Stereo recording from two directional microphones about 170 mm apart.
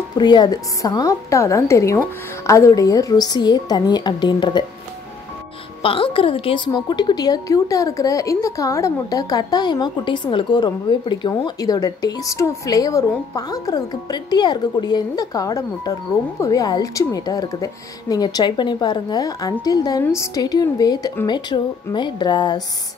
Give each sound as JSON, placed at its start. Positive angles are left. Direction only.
{"t": 0.2, "sound": "a woman's voice", "side_deg": 25}
{"t": 5.8, "sound": "a woman's voice", "side_deg": 30}